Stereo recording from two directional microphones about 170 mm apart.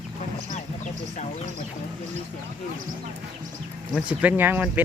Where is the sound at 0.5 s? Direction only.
45° left (ahead or behind).